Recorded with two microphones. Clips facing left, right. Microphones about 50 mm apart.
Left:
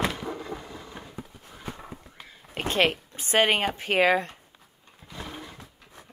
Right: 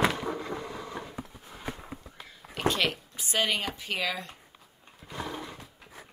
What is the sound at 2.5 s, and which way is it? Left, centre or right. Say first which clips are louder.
Speech: left 3 dB; left.